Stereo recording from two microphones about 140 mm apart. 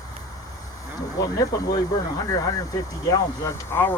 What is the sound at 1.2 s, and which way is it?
Speech, 25° left (ahead or behind).